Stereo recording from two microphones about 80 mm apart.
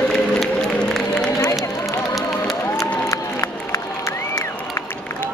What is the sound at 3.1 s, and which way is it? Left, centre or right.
Music, left.